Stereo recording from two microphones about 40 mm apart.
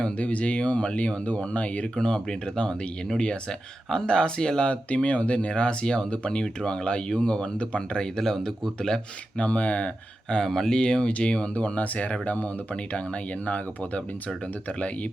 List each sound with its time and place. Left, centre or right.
0.2 s speech: left
2.0 s speech: centre
4.7 s speech: left; by 9.0 s centre
9.4 s speech: left
10.4 s speech: centre
10.8 s speech: left